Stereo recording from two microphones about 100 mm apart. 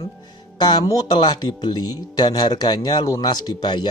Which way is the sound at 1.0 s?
50° left (ahead or behind).